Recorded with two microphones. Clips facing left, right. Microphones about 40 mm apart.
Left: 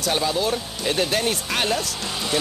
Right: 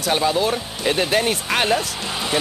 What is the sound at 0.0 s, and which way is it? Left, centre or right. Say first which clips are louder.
Speech: right 3 dB; right.